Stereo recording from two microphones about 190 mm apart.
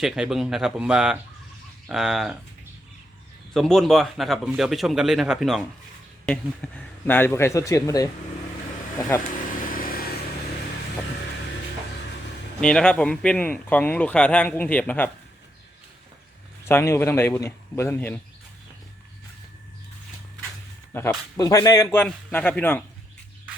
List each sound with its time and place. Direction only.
0.0 s speech: centre (ahead or behind)
3.5 s speech: centre (ahead or behind)
9.7 s vehicle: 50° left (ahead or behind)
12.5 s speech: 5° left (ahead or behind)
16.6 s speech: 15° left (ahead or behind)
20.9 s speech: 15° left (ahead or behind)